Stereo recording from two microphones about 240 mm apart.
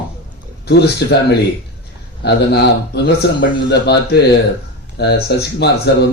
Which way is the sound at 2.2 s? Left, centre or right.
Left.